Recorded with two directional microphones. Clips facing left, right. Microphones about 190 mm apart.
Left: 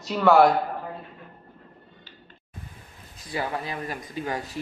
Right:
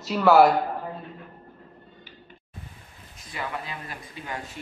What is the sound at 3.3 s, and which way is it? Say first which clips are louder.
Speech: left 4 dB; 35° left (ahead or behind).